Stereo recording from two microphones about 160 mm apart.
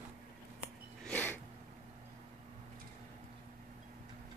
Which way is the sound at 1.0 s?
10° left (ahead or behind).